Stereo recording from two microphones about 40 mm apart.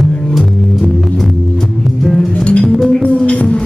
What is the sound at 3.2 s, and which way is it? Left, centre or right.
Music, left.